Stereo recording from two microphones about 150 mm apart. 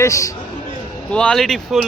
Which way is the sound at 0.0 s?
20° left (ahead or behind).